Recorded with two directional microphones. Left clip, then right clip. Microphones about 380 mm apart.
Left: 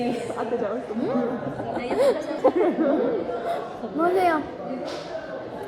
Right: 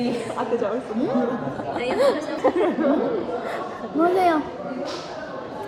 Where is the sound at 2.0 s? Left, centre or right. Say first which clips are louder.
Even; centre.